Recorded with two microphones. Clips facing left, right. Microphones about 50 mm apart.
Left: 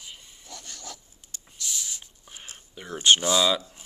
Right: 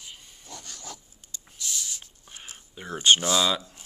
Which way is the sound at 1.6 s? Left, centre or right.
Centre.